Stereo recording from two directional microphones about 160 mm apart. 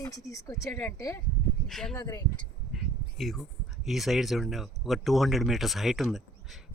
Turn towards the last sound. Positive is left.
turn(degrees=0)  # may be behind; listen again after turning